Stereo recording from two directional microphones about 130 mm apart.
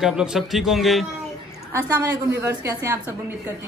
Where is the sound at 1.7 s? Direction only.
25° right (ahead or behind).